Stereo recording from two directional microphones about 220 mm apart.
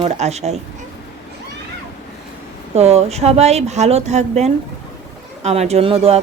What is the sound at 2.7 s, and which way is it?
A woman's voice, 30° right (ahead or behind).